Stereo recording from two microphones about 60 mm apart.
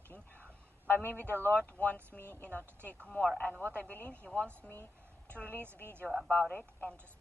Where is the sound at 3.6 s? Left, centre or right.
Left.